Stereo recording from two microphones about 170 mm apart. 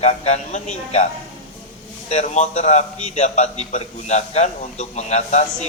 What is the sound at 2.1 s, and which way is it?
A man's voice, 40° left (ahead or behind).